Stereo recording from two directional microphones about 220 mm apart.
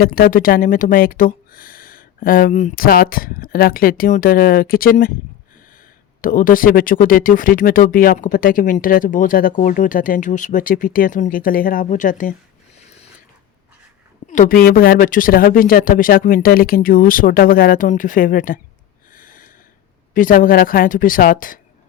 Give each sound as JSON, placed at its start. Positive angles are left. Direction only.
{"t": 0.0, "sound": "speech", "side_deg": 40}
{"t": 6.2, "sound": "speech", "side_deg": 40}
{"t": 14.3, "sound": "speech", "side_deg": 40}
{"t": 19.1, "sound": "snort", "side_deg": 40}
{"t": 20.1, "sound": "speech", "side_deg": 40}